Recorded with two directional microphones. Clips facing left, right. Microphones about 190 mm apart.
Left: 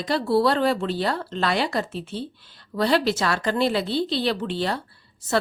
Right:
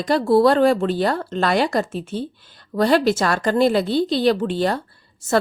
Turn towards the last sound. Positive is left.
turn(degrees=-45)  # may be behind; listen again after turning